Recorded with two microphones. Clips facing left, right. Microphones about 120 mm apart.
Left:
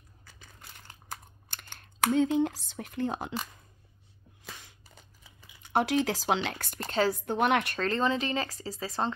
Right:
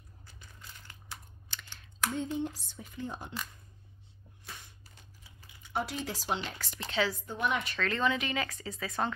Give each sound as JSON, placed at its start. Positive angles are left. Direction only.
{"t": 0.4, "sound": "crushing", "side_deg": 60}
{"t": 0.8, "sound": "typing", "side_deg": 50}
{"t": 2.0, "sound": "speech", "side_deg": 90}
{"t": 5.6, "sound": "speech", "side_deg": 75}
{"t": 6.6, "sound": "speech", "side_deg": 50}
{"t": 7.2, "sound": "a woman's voice", "side_deg": 75}
{"t": 7.7, "sound": "speech", "side_deg": 35}